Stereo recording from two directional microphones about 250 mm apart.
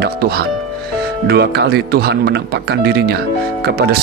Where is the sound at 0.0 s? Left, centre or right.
Right.